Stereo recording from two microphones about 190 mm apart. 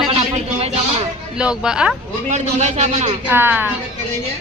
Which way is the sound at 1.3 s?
5° right (ahead or behind).